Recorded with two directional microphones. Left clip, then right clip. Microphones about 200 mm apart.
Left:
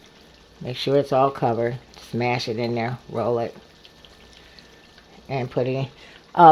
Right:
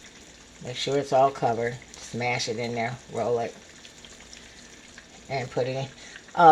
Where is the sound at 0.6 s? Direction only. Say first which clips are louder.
Left 6 dB; 45° left (ahead or behind).